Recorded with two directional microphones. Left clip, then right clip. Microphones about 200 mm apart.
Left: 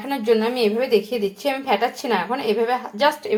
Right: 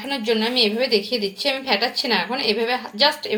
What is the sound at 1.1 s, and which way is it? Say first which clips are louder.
A woman's voice: even; 40° left (ahead or behind).